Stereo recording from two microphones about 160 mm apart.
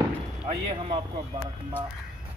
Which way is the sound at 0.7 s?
35° right (ahead or behind).